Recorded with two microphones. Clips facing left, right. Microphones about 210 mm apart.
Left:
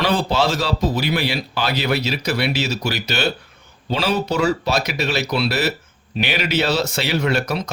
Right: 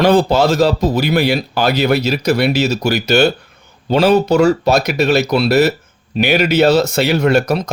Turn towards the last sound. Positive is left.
turn(degrees=-45)  # may be behind; listen again after turning